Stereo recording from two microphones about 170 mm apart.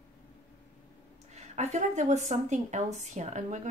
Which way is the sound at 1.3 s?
40° right (ahead or behind).